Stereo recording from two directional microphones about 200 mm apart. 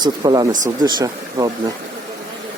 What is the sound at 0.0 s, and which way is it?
Speech, 20° right (ahead or behind).